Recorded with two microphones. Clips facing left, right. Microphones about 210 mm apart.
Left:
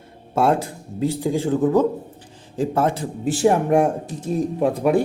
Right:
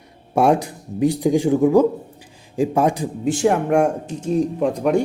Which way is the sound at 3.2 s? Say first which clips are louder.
Even; 5° left (ahead or behind).